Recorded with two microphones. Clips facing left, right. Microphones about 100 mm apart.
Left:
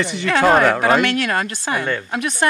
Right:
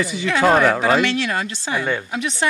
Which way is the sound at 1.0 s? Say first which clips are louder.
Left 2 dB; 55° left (ahead or behind).